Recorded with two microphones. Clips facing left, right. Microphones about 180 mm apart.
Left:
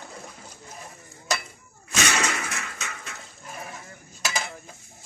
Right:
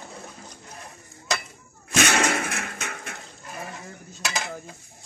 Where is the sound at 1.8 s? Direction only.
60° right (ahead or behind).